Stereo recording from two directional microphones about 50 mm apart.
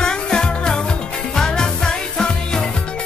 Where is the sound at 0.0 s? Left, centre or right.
Centre.